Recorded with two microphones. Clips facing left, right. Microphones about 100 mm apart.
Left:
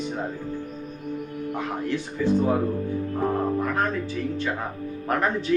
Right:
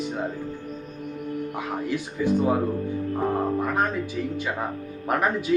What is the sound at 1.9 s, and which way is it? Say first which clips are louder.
Speech: left 1 dB; 15° right (ahead or behind).